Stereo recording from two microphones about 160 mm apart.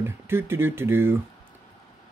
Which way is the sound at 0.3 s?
15° right (ahead or behind).